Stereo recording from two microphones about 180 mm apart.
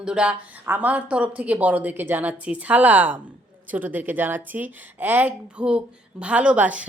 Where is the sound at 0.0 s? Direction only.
5° right (ahead or behind).